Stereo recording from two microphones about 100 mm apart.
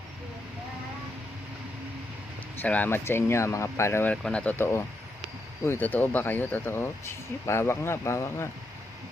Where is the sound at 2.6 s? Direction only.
15° left (ahead or behind).